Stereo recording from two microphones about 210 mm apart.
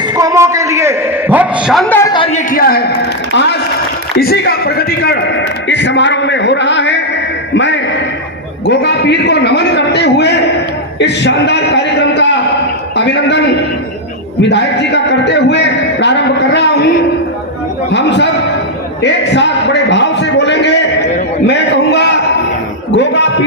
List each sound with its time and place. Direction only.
0.2 s a man's voice: 15° right (ahead or behind); by 2.0 s centre (ahead or behind)
2.0 s a woman's voice: 20° left (ahead or behind)
2.5 s a man's voice: 45° left (ahead or behind)
7.5 s a sound: 60° left (ahead or behind)
8.6 s a man's voice: 55° left (ahead or behind)
14.4 s a man's voice: 55° left (ahead or behind)
17.9 s a man's voice: 55° left (ahead or behind)